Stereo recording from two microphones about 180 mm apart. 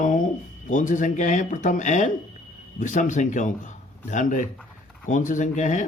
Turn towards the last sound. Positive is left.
turn(degrees=45)  # may be behind; listen again after turning